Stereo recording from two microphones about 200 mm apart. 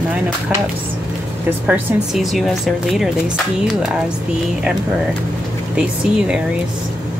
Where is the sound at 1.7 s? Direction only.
5° right (ahead or behind).